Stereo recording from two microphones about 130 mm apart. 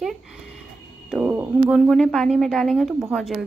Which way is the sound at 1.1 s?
15° right (ahead or behind).